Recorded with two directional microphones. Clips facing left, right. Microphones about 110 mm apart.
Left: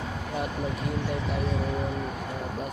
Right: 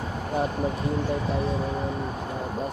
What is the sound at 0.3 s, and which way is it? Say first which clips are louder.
Speech: right 5 dB; 35° right (ahead or behind).